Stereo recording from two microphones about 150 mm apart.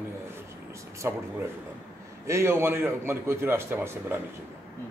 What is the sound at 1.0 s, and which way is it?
Speech, 15° right (ahead or behind).